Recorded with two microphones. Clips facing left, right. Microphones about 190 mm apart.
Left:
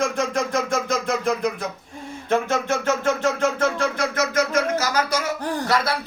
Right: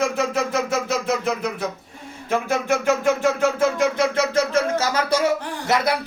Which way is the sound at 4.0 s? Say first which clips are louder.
Right 3 dB; 30° right (ahead or behind).